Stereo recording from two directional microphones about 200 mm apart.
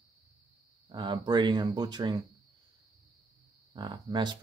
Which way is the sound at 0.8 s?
20° right (ahead or behind).